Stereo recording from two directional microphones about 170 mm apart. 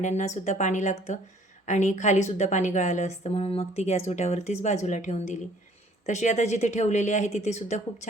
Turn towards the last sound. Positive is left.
turn(degrees=40)  # may be behind; listen again after turning